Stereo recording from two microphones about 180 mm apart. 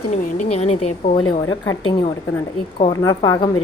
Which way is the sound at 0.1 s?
40° left (ahead or behind).